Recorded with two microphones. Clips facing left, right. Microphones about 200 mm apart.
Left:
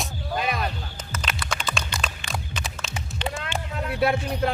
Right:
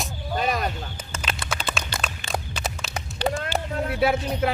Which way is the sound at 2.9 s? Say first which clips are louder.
Right 5 dB; 40° right (ahead or behind).